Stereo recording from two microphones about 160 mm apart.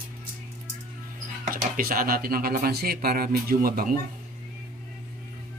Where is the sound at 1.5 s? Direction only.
65° right (ahead or behind).